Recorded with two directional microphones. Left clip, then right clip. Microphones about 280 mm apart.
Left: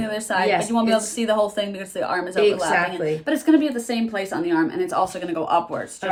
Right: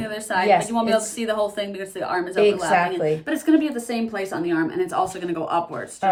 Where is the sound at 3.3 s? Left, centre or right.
Centre.